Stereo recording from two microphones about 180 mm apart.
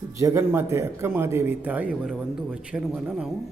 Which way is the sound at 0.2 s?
15° right (ahead or behind).